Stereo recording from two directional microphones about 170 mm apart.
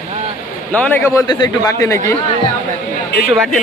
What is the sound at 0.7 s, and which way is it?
A man's voice, 10° left (ahead or behind).